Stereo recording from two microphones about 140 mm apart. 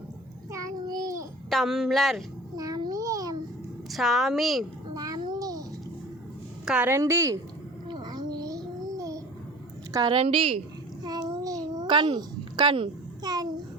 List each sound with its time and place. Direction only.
0.5 s child singing: 25° right (ahead or behind)
1.5 s speech: centre (ahead or behind)
2.6 s babbling: 25° right (ahead or behind)
3.9 s speech: centre (ahead or behind)
4.9 s a sound: 25° right (ahead or behind)
6.7 s a woman's voice: 15° right (ahead or behind)
7.9 s babbling: 30° right (ahead or behind)
9.9 s a woman's voice: 30° right (ahead or behind)
10.2 s a woman's voice: 45° right (ahead or behind)
11.0 s a sound: 30° right (ahead or behind)